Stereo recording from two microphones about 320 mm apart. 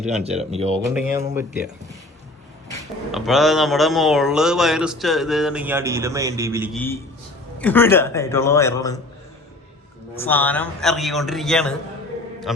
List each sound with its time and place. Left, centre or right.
0.1 s speech: centre
0.9 s speech: centre
3.1 s speech: centre
6.7 s a man's voice: centre
10.2 s speech: centre